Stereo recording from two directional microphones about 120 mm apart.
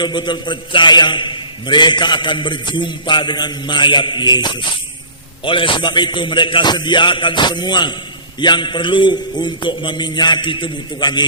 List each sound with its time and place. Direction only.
0.0 s a man's voice: 40° left (ahead or behind)